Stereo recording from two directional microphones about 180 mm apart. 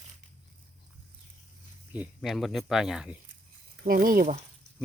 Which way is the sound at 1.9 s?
5° right (ahead or behind).